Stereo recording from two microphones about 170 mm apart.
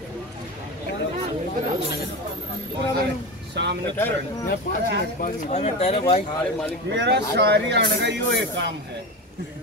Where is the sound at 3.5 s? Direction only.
90° right.